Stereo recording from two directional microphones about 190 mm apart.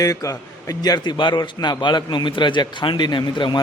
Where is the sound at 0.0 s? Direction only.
20° left (ahead or behind).